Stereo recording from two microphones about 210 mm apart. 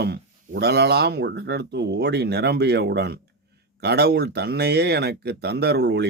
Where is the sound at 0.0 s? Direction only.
50° right (ahead or behind).